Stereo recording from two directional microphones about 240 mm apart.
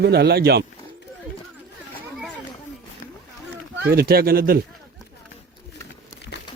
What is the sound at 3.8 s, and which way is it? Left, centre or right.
Speech, right.